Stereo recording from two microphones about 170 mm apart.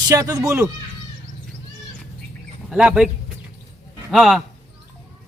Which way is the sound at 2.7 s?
5° right (ahead or behind).